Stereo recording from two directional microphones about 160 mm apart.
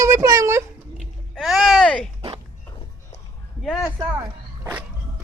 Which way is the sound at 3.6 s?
Centre (ahead or behind).